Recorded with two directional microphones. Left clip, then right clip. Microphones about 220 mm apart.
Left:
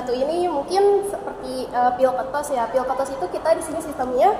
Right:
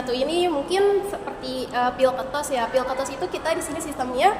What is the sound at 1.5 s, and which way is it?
Speech, 25° right (ahead or behind).